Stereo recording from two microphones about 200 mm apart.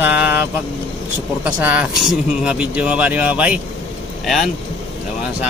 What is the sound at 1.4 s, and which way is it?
Speech, 5° right (ahead or behind).